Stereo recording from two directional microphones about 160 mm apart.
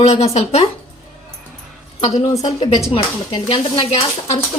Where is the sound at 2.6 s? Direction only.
35° left (ahead or behind).